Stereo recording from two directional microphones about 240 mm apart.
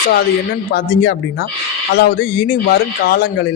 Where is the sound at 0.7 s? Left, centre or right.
Left.